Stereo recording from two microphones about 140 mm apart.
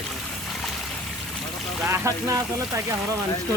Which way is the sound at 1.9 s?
20° right (ahead or behind).